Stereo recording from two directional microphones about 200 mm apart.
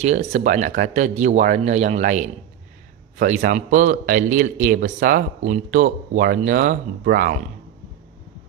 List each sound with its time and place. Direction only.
0.0 s speech: 35° right (ahead or behind)